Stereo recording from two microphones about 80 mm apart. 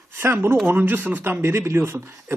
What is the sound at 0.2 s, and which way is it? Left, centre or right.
A man's voice, right.